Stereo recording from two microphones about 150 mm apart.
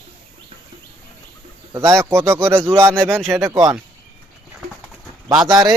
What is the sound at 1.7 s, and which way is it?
Speech, 20° right (ahead or behind).